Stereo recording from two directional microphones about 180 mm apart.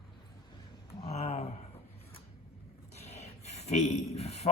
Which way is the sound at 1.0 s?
35° left (ahead or behind).